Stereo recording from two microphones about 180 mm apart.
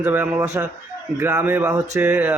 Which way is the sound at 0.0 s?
10° right (ahead or behind).